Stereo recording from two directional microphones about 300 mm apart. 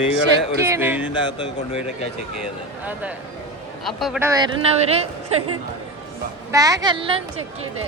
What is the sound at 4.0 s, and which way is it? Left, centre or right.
Speech, centre.